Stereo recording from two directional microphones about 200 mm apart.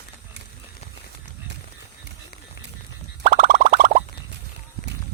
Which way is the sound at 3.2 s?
45° right (ahead or behind).